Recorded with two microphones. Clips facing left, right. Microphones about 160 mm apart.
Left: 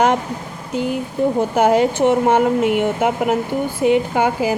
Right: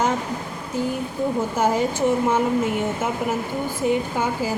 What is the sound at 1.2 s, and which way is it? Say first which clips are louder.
A woman's voice: left 6 dB; 75° left (ahead or behind).